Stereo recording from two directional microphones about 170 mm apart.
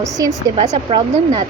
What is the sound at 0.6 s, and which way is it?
Speech, 35° right (ahead or behind).